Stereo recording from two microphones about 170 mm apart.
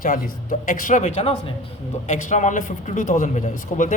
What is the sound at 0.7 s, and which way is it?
A man's voice, 50° left (ahead or behind).